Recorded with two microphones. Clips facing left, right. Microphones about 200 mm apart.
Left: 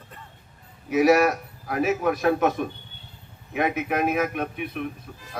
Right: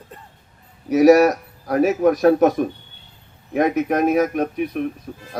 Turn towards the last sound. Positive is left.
turn(degrees=-40)  # may be behind; listen again after turning